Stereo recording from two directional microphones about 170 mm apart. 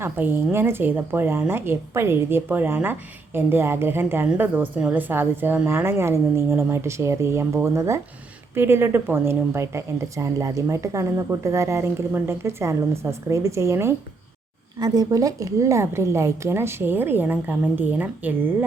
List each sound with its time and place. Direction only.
0.0 s a woman's voice: 10° right (ahead or behind)